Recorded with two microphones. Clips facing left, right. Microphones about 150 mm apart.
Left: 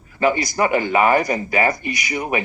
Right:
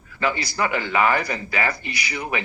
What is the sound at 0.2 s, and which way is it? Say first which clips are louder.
Speech: left 6 dB; 20° left (ahead or behind).